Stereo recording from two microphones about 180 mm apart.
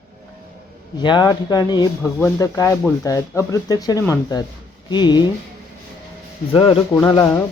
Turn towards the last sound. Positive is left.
turn(degrees=20)  # may be behind; listen again after turning